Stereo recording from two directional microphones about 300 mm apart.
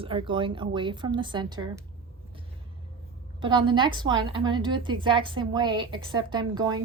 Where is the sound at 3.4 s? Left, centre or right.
Centre.